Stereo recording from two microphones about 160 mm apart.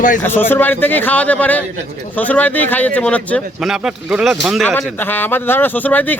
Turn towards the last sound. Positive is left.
turn(degrees=10)  # may be behind; listen again after turning